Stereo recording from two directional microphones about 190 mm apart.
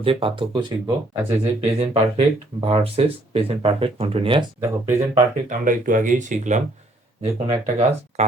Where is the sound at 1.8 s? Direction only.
30° right (ahead or behind).